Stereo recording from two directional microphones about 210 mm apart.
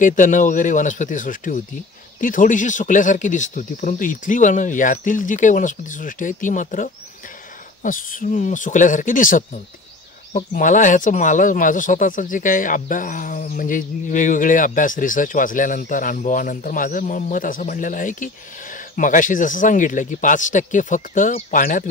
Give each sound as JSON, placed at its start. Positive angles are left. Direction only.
{"t": 0.0, "sound": "speech", "side_deg": 40}